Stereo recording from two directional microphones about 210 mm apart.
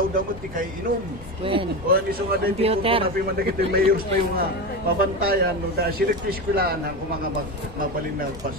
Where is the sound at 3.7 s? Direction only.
45° right (ahead or behind).